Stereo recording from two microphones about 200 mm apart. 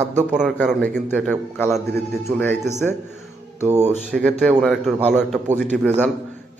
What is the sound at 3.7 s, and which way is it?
Speech, 35° right (ahead or behind).